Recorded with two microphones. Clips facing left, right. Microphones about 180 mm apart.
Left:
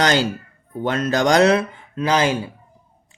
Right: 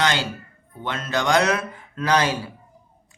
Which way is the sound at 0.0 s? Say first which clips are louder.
Left 5 dB; 40° left (ahead or behind).